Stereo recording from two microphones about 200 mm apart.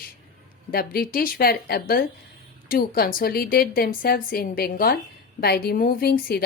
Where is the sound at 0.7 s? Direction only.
50° left (ahead or behind).